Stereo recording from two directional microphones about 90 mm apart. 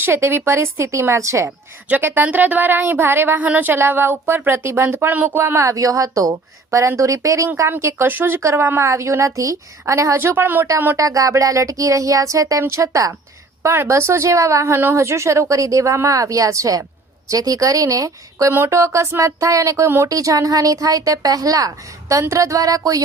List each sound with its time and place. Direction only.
0.0 s a woman's voice: 30° right (ahead or behind)
1.5 s a woman's voice: 20° right (ahead or behind)
5.4 s a woman's voice: 30° right (ahead or behind)
10.9 s a woman's voice: 40° right (ahead or behind)